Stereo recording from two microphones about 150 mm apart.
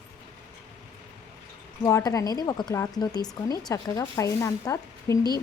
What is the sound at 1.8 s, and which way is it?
Speech, 25° left (ahead or behind).